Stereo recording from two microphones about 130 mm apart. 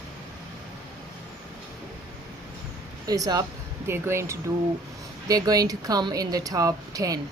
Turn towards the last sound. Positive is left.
turn(degrees=-25)  # may be behind; listen again after turning